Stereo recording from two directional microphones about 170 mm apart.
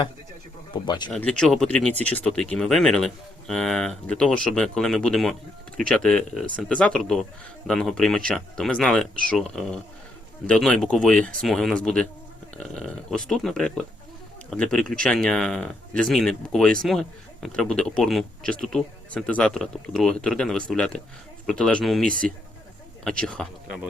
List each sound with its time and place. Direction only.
0.7 s speech: 25° left (ahead or behind)
1.1 s a man's voice: 5° left (ahead or behind)
23.2 s a man's voice: 5° left (ahead or behind)